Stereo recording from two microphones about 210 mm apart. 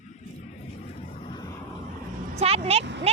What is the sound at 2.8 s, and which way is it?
Speech, 55° right (ahead or behind).